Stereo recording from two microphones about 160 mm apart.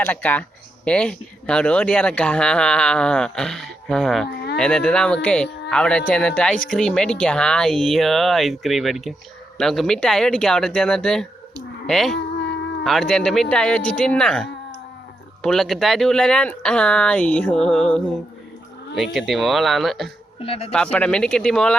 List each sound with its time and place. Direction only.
0.0 s speech: 10° left (ahead or behind)
20.4 s speech: 35° left (ahead or behind)
20.7 s speech: 5° left (ahead or behind)